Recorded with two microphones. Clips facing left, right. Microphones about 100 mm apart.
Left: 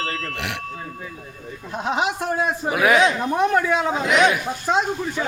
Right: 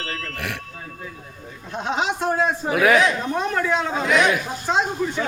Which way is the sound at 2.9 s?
15° left (ahead or behind).